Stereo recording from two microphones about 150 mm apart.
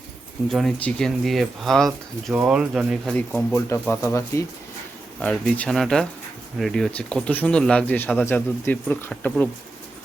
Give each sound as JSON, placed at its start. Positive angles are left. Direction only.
{"t": 0.4, "sound": "speech", "side_deg": 5}
{"t": 3.2, "sound": "speech", "side_deg": 10}
{"t": 5.2, "sound": "speech", "side_deg": 5}